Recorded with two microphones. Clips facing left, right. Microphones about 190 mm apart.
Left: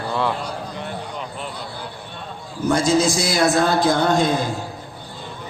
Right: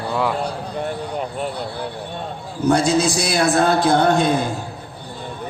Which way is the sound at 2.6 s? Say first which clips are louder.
Right 1 dB; 65° right (ahead or behind).